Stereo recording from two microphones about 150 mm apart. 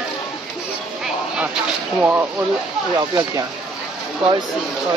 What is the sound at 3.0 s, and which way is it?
Speech, 25° right (ahead or behind).